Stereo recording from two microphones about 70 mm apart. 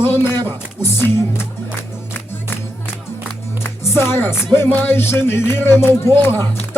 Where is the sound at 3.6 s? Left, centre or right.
Left.